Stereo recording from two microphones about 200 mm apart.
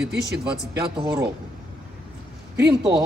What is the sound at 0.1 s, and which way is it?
Speech, 55° right (ahead or behind).